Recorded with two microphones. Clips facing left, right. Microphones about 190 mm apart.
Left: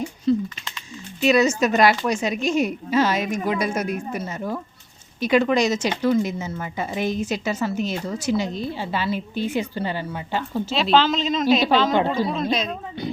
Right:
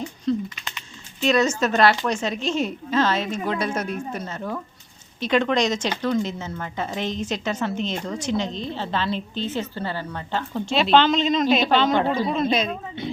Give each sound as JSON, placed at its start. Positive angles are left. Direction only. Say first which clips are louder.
{"t": 0.3, "sound": "a woman's voice", "louder": "left 3 dB", "side_deg": 5}
{"t": 12.0, "sound": "a man's voice", "louder": "even", "side_deg": -15}
{"t": 12.3, "sound": "a woman's voice", "louder": "right 2 dB", "side_deg": 0}